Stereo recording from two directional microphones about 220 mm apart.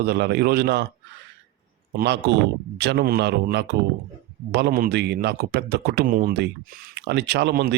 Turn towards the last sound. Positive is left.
turn(degrees=-45)  # may be behind; listen again after turning